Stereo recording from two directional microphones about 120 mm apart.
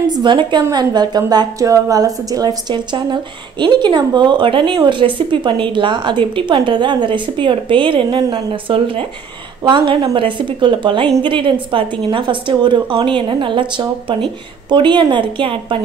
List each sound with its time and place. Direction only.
0.1 s a woman's voice: 40° right (ahead or behind)